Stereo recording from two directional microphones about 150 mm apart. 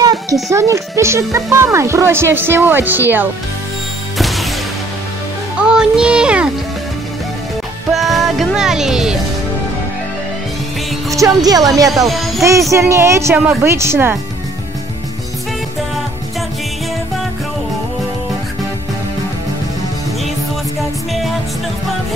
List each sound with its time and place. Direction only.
0.0 s speech: 25° right (ahead or behind)
4.2 s music: centre (ahead or behind)
5.6 s speech: 5° right (ahead or behind)
7.9 s music: centre (ahead or behind)
11.1 s a woman's voice: 25° right (ahead or behind)